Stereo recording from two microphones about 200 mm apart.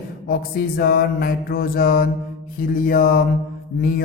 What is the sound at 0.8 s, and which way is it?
Speech, 50° left (ahead or behind).